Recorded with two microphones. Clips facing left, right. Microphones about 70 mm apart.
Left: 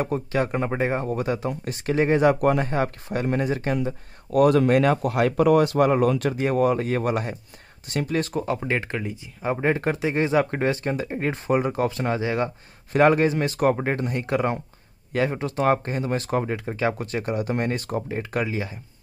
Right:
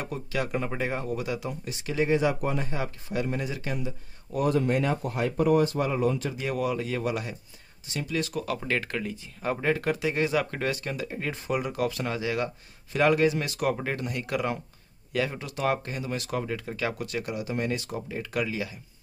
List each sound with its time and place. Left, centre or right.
0.0 s speech: left
4.3 s speech: left
6.3 s speech: left
8.5 s speech: left